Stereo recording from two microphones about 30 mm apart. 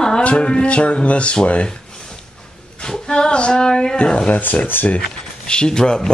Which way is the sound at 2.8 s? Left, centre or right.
Left.